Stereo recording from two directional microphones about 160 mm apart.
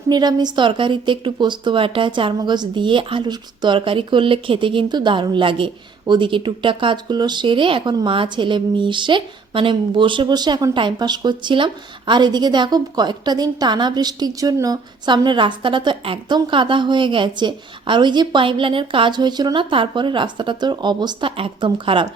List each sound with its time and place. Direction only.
0.1 s a woman's voice: 25° right (ahead or behind)